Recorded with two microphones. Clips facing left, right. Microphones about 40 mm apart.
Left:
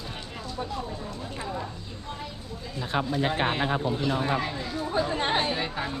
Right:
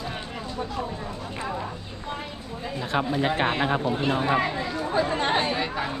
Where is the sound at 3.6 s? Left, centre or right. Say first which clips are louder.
Right 3 dB; right.